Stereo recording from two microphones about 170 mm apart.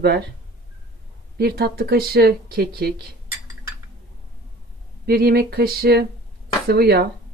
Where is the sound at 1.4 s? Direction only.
70° right (ahead or behind).